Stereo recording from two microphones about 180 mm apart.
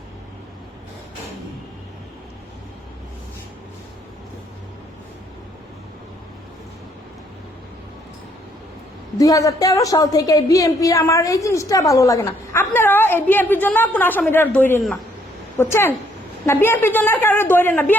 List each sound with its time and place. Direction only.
9.1 s a woman's voice: 20° left (ahead or behind)